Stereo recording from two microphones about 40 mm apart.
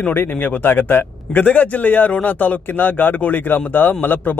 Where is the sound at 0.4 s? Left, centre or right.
Left.